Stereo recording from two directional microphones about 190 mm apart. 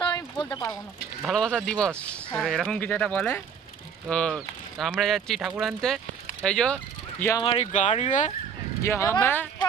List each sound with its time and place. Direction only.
0.0 s a sound: 20° left (ahead or behind)
1.2 s speech: 5° left (ahead or behind)
7.4 s speech: 30° left (ahead or behind)
8.8 s speech: 15° left (ahead or behind)